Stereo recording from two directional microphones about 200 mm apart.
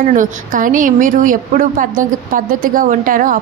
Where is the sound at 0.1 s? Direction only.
40° right (ahead or behind).